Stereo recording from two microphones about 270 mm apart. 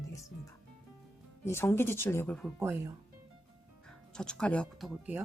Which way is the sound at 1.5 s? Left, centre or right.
Centre.